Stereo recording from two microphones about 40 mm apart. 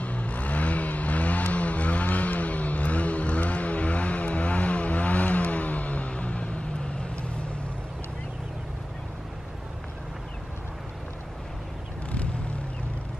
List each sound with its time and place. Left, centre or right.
0.0 s vehicle: left